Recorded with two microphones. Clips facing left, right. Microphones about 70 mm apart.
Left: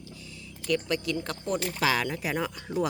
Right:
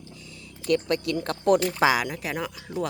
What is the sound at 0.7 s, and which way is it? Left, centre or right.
Speech, right.